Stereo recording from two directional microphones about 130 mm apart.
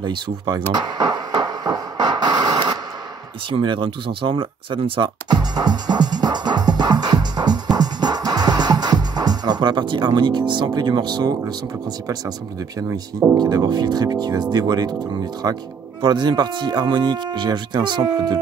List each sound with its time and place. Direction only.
0.0 s speech: 35° right (ahead or behind)
0.7 s a sound: 35° right (ahead or behind)
3.4 s speech: 40° right (ahead or behind)
7.7 s music: 30° right (ahead or behind)
12.8 s speech: 20° right (ahead or behind)
13.4 s speech: 30° right (ahead or behind)